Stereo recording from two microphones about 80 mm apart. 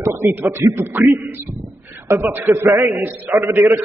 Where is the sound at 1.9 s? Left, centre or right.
Right.